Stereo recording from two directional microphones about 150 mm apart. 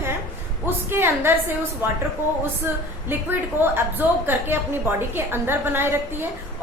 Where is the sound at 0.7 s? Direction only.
15° right (ahead or behind).